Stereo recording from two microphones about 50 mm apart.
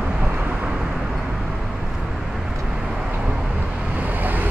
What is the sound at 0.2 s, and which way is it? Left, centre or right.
Vehicle, right.